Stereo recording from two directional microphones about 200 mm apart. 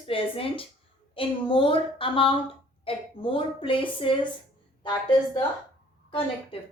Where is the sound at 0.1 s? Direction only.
25° left (ahead or behind).